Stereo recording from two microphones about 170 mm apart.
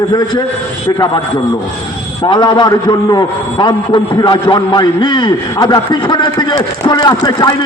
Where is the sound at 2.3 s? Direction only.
25° left (ahead or behind).